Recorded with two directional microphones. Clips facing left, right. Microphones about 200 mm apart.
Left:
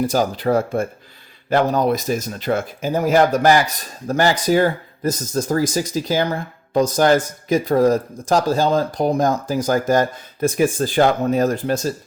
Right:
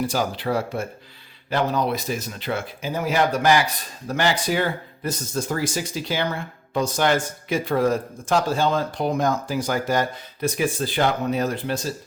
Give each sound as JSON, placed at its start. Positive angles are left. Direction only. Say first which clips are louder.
{"t": 0.0, "sound": "speech", "louder": "left 5 dB", "side_deg": 45}